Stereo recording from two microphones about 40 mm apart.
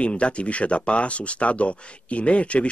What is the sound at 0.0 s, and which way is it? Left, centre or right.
Speech, left.